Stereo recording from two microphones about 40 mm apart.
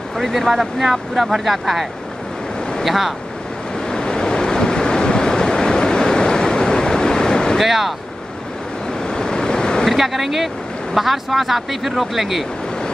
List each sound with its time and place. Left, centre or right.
0.2 s speech: centre
3.9 s waves: centre
7.5 s speech: centre
9.0 s waves: centre
9.8 s speech: centre